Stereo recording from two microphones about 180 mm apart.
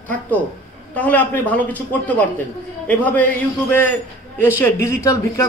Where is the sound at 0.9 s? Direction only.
10° left (ahead or behind).